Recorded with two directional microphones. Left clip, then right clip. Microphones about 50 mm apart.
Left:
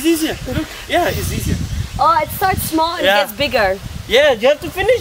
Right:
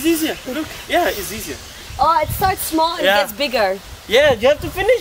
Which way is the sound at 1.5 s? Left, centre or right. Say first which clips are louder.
Left 4 dB; centre.